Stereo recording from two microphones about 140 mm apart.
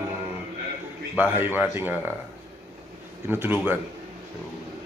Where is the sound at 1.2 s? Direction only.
15° right (ahead or behind).